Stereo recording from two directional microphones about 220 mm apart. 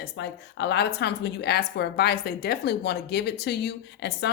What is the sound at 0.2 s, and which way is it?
A woman's voice, 50° left (ahead or behind).